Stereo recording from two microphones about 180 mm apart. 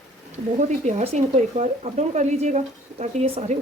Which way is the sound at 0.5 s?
40° right (ahead or behind).